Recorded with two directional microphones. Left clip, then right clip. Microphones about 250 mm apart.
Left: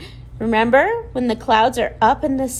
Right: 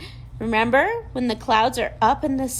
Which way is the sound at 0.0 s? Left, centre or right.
Left.